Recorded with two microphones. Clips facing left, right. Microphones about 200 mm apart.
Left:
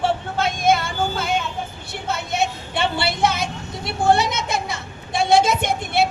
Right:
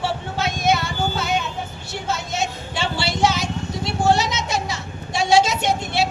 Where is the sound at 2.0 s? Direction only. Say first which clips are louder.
Left 2 dB; 60° left (ahead or behind).